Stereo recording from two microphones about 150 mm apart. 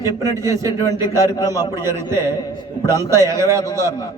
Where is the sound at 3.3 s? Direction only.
20° right (ahead or behind).